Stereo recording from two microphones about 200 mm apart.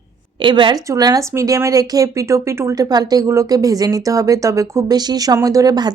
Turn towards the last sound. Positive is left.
turn(degrees=-20)  # may be behind; listen again after turning